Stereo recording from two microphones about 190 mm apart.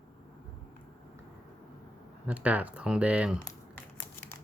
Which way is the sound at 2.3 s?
10° right (ahead or behind).